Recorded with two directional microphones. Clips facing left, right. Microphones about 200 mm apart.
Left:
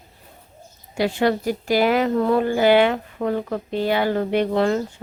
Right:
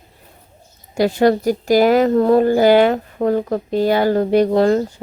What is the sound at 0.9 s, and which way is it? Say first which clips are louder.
A woman's voice: right 6 dB; 40° right (ahead or behind).